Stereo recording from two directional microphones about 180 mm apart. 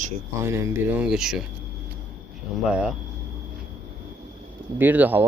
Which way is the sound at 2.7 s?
5° right (ahead or behind).